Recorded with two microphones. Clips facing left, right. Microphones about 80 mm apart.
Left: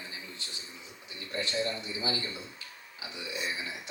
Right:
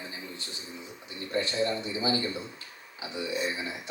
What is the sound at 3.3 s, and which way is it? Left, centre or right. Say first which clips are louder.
Speech: right 5 dB; right.